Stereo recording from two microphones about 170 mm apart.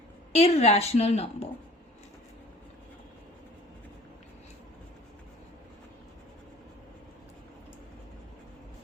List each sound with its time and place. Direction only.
0.3 s a woman's voice: 35° left (ahead or behind)